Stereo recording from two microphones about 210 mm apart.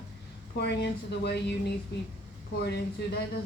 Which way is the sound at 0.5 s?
50° left (ahead or behind).